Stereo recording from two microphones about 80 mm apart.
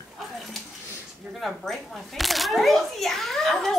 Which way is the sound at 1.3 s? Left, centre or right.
Centre.